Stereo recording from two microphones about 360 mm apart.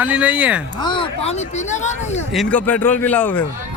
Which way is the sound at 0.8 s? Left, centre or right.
Centre.